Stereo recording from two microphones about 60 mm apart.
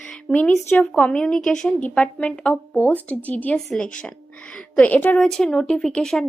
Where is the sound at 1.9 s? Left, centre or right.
Left.